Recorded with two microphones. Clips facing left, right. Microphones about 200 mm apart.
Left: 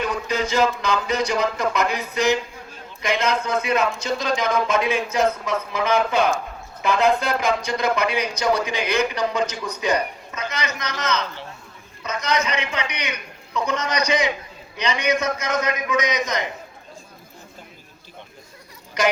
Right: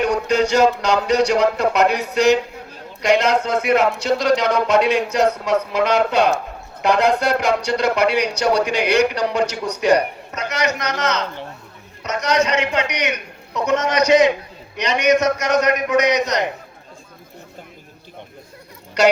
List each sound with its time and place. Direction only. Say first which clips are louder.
0.0 s speech: right 7 dB; 70° right (ahead or behind)